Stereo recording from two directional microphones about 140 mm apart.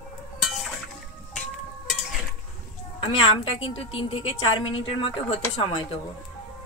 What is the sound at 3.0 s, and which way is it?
A woman's voice, 40° left (ahead or behind).